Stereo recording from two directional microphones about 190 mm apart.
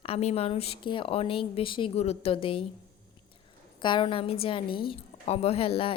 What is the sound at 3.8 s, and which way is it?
A woman's voice, 25° left (ahead or behind).